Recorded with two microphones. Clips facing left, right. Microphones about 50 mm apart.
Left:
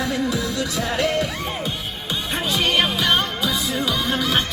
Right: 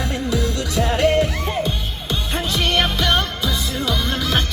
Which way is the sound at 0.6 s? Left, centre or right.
Right.